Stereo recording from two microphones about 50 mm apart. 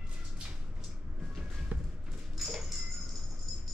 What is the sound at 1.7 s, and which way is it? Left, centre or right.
Music, right.